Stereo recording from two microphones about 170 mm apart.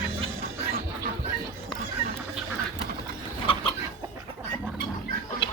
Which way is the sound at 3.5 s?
30° left (ahead or behind).